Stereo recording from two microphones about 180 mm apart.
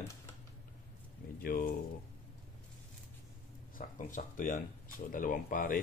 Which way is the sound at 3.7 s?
45° left (ahead or behind).